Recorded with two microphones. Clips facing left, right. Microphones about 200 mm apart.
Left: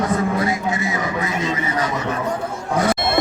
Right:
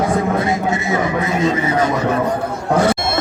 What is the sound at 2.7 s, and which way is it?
Speech, 65° right (ahead or behind).